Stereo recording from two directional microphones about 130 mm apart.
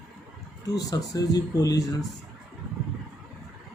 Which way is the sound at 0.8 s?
30° left (ahead or behind).